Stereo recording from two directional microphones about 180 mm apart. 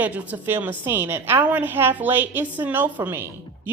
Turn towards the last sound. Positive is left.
turn(degrees=-10)  # may be behind; listen again after turning